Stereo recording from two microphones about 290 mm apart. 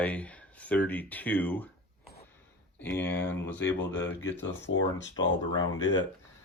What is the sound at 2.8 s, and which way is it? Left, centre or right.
Speech, centre.